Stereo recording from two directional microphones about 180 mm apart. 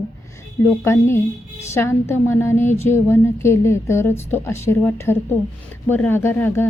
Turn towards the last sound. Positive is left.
turn(degrees=10)  # may be behind; listen again after turning